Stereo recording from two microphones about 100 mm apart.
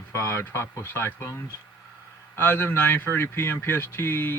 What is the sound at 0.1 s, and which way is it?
Speech, 25° left (ahead or behind).